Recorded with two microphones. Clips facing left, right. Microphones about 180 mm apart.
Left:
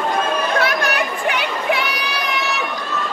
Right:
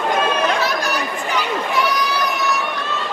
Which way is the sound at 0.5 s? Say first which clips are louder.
Left 2 dB; 60° left (ahead or behind).